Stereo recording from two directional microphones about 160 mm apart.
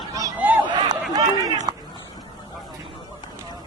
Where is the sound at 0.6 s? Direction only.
30° right (ahead or behind).